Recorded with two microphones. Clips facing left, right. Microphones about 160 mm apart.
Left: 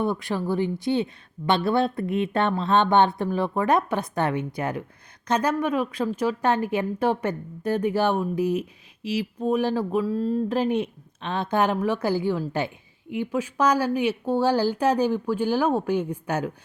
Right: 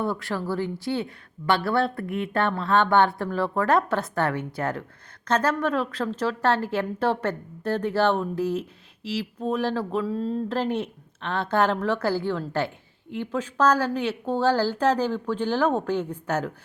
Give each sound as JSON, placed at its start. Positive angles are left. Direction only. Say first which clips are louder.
{"t": 0.0, "sound": "a woman's voice", "louder": "left 2 dB", "side_deg": 20}
{"t": 10.1, "sound": "speech", "louder": "left 3 dB", "side_deg": 5}
{"t": 10.5, "sound": "a woman's voice", "louder": "left 3 dB", "side_deg": 15}